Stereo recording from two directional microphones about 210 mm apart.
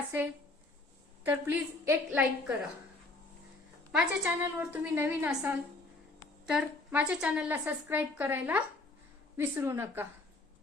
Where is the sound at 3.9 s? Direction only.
5° right (ahead or behind).